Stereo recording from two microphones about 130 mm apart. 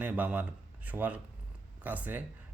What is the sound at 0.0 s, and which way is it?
Speech, 10° right (ahead or behind).